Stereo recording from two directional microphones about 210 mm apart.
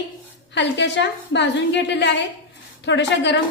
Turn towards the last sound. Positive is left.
turn(degrees=55)  # may be behind; listen again after turning